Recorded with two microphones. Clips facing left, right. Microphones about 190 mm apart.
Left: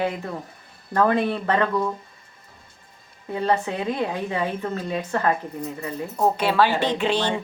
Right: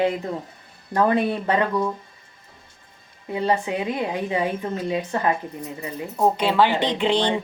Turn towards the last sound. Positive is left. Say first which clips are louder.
# right 2 dB
turn(degrees=-15)  # may be behind; listen again after turning